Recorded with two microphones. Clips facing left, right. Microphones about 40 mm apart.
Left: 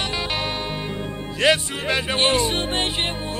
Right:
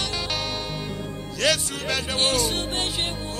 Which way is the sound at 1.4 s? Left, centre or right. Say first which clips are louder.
Left 4 dB; left.